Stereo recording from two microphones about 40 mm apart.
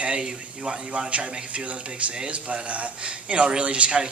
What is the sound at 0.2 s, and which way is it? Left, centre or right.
Speech, centre.